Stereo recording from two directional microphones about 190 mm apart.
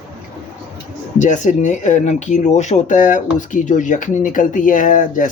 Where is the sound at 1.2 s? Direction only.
40° left (ahead or behind).